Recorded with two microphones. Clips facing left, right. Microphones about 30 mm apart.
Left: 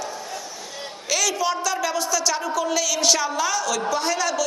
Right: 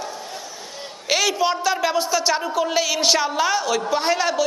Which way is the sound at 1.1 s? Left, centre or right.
Right.